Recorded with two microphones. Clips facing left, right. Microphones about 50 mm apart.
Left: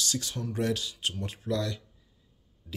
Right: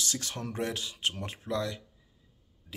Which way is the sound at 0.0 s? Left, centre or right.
Right.